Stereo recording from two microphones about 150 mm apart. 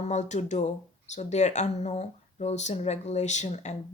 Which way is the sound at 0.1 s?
50° left (ahead or behind).